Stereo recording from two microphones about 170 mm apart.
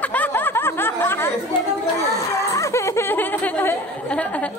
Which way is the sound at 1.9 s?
20° left (ahead or behind).